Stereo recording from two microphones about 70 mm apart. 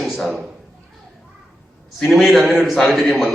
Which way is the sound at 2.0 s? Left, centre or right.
Centre.